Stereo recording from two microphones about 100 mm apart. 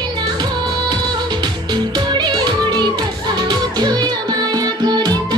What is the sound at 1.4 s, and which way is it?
Music, 45° right (ahead or behind).